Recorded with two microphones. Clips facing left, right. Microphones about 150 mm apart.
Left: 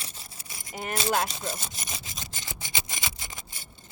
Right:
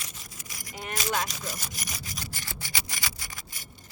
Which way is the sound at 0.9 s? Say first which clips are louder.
Left 3 dB; 30° left (ahead or behind).